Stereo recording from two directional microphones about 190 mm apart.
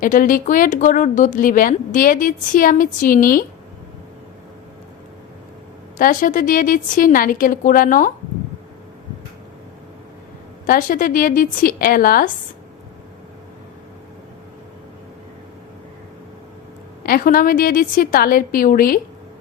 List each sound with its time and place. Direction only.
0.0 s a woman's voice: 45° left (ahead or behind)
6.0 s a woman's voice: 45° left (ahead or behind)
10.7 s a woman's voice: 45° left (ahead or behind)
17.0 s a woman's voice: 50° left (ahead or behind)